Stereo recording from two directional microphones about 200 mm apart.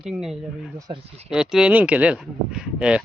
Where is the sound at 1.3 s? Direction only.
5° right (ahead or behind).